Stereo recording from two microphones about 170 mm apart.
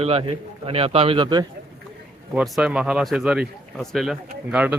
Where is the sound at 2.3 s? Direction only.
Centre (ahead or behind).